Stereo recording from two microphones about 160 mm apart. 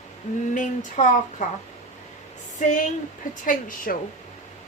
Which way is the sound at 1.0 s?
50° left (ahead or behind).